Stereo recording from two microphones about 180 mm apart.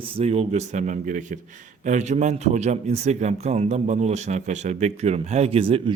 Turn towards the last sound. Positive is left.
turn(degrees=-30)  # may be behind; listen again after turning